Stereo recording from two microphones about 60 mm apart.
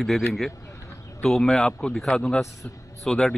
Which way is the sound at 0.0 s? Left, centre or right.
Centre.